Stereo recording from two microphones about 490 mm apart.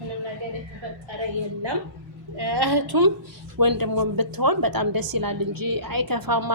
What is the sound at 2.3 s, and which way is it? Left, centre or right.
A woman's voice, right.